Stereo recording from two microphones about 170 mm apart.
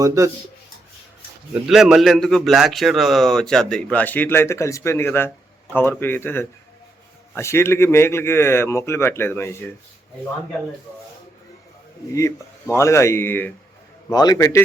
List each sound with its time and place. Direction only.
0.0 s speech: 20° right (ahead or behind)
1.6 s a man's voice: 5° right (ahead or behind); by 9.6 s 15° left (ahead or behind)
12.1 s speech: 15° left (ahead or behind)
14.1 s a man's voice: 20° left (ahead or behind)